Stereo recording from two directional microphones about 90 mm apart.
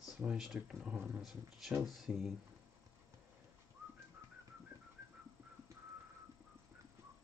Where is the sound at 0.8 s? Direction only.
15° right (ahead or behind).